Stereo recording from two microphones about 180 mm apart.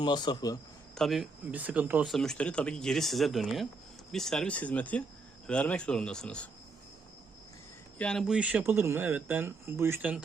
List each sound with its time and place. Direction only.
0.0 s a man's voice: 25° left (ahead or behind)
0.9 s speech: centre (ahead or behind)
2.1 s speech: 5° left (ahead or behind)
7.9 s speech: 5° left (ahead or behind)